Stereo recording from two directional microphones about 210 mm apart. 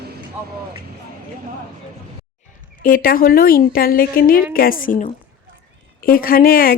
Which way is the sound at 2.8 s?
45° left (ahead or behind).